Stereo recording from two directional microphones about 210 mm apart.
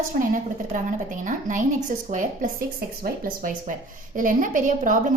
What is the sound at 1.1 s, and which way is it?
Speech, 35° right (ahead or behind).